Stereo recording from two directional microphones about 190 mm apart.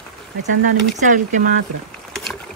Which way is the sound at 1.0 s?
40° right (ahead or behind).